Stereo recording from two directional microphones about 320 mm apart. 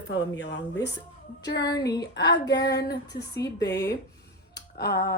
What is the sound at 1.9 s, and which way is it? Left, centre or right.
Speech, left.